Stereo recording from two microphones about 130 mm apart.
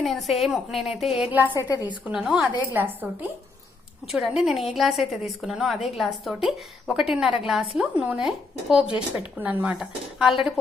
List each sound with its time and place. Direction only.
0.0 s a woman's voice: centre (ahead or behind)
1.3 s speech: 15° right (ahead or behind)
1.5 s a woman's voice: 30° left (ahead or behind)
2.0 s speech: 5° right (ahead or behind)
4.1 s a woman's voice: centre (ahead or behind)